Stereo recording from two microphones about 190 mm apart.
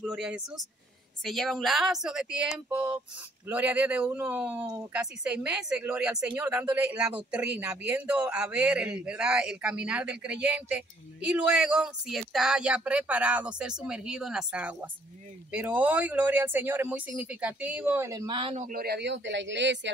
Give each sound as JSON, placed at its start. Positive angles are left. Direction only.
{"t": 0.0, "sound": "a man's voice", "side_deg": -5}
{"t": 18.7, "sound": "speech", "side_deg": -55}